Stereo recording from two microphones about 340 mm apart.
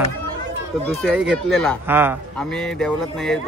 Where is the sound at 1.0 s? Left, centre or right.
Centre.